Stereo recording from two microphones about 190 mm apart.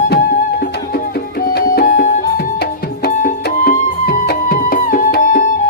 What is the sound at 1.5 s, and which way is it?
Music, 50° left (ahead or behind).